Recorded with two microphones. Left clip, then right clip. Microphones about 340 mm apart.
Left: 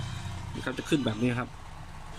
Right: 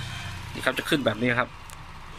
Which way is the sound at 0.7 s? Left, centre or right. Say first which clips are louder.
Right 6 dB; centre.